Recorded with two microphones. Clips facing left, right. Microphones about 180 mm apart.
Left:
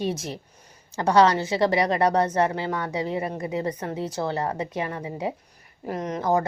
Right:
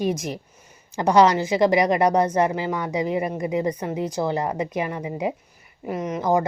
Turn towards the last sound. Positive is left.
turn(degrees=-15)  # may be behind; listen again after turning